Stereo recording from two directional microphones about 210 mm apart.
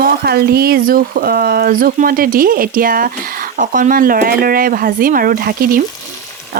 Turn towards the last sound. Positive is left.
turn(degrees=-45)  # may be behind; listen again after turning